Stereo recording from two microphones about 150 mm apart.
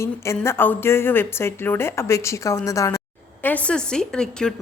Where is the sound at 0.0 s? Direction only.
20° left (ahead or behind).